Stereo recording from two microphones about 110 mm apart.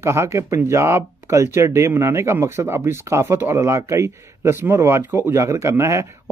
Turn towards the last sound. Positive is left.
turn(degrees=-25)  # may be behind; listen again after turning